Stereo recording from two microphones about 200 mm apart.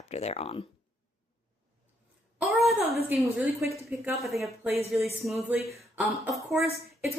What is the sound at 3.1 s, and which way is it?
A woman's voice, 10° right (ahead or behind).